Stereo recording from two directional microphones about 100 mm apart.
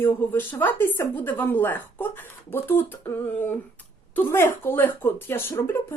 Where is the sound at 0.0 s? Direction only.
20° left (ahead or behind).